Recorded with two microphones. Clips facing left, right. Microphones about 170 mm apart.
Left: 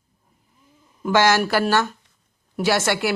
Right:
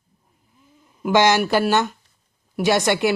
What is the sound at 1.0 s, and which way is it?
Speech, 20° right (ahead or behind).